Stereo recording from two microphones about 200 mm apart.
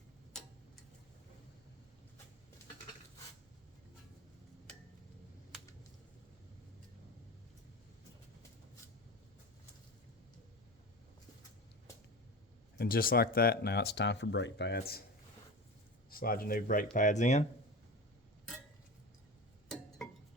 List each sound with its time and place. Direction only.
12.7 s speech: 50° left (ahead or behind)
16.0 s speech: 45° left (ahead or behind)